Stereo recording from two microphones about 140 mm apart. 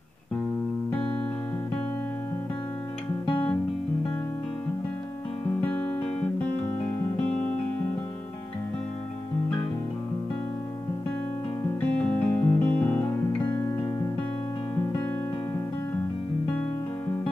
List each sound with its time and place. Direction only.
3.3 s music: 35° left (ahead or behind)
5.6 s music: 15° left (ahead or behind)
12.0 s music: 10° left (ahead or behind)